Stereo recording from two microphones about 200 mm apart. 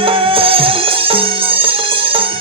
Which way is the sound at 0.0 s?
25° right (ahead or behind).